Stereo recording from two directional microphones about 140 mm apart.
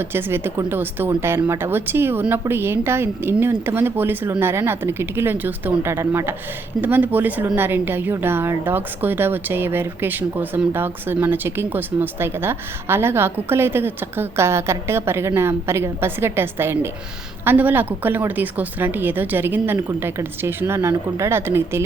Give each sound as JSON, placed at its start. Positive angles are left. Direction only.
{"t": 0.0, "sound": "a woman's voice", "side_deg": -15}